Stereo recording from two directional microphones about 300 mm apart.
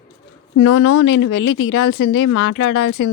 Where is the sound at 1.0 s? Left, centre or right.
Left.